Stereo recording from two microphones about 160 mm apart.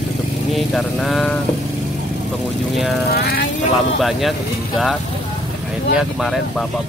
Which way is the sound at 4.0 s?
Centre (ahead or behind).